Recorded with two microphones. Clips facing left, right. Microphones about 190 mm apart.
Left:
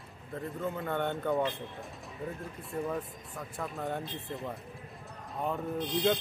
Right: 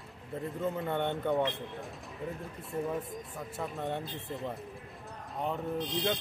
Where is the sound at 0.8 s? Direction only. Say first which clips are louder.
Left 1 dB; centre (ahead or behind).